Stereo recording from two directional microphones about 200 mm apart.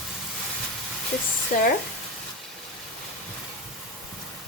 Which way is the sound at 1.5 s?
40° left (ahead or behind).